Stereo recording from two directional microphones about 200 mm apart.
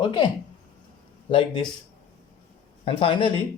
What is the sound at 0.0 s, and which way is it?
Speech, 25° left (ahead or behind).